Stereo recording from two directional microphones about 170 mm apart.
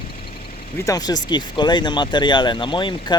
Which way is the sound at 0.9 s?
20° left (ahead or behind).